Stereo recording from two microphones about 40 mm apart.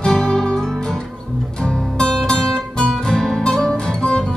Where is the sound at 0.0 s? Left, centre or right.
Centre.